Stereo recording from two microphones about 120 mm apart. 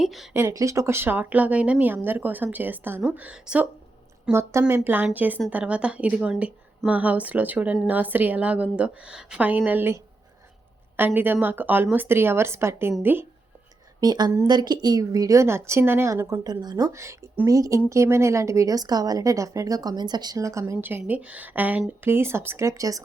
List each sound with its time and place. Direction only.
0.0 s speech: centre (ahead or behind)
0.3 s a woman's voice: 25° right (ahead or behind)
4.3 s a woman's voice: 20° right (ahead or behind)
14.0 s a woman's voice: 35° right (ahead or behind)
21.0 s a woman's voice: 10° right (ahead or behind); by 23.0 s 30° right (ahead or behind)